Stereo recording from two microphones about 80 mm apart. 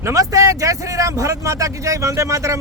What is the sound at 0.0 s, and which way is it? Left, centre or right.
Speech, right.